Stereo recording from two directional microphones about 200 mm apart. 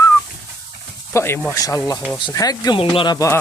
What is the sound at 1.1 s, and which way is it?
Speech, 10° left (ahead or behind).